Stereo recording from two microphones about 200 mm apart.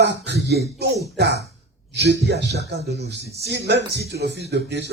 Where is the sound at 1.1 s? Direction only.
55° right (ahead or behind).